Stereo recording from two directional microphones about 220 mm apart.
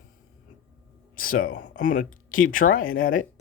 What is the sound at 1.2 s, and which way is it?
Speech, 40° left (ahead or behind).